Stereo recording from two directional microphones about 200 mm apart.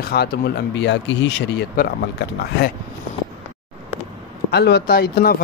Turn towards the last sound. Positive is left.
turn(degrees=50)  # may be behind; listen again after turning